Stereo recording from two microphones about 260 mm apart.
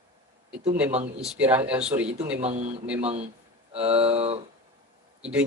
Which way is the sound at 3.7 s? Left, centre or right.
Right.